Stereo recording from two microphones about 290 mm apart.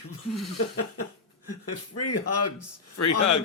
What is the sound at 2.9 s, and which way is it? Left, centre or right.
Speech, left.